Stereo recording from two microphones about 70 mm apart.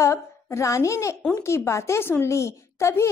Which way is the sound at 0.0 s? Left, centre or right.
Left.